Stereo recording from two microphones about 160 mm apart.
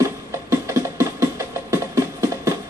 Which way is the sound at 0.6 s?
15° right (ahead or behind).